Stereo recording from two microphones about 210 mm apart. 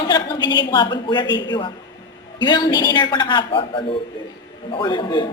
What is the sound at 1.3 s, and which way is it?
Speech, 60° left (ahead or behind).